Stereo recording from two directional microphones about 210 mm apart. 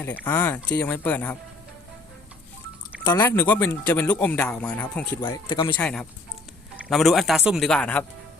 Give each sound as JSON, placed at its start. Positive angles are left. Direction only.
{"t": 0.3, "sound": "speech", "side_deg": 10}
{"t": 3.0, "sound": "speech", "side_deg": 15}
{"t": 5.5, "sound": "speech", "side_deg": 20}
{"t": 5.7, "sound": "a man's voice", "side_deg": 5}